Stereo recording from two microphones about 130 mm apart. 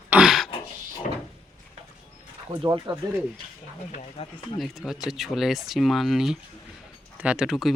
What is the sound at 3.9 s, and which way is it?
Speech, 50° left (ahead or behind).